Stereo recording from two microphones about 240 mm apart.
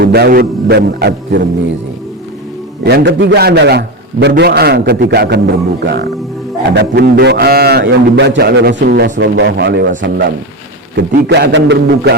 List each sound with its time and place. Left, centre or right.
0.0 s a man's voice: right
2.8 s a man's voice: right